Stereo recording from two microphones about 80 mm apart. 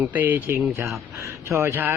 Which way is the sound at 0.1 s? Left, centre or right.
Right.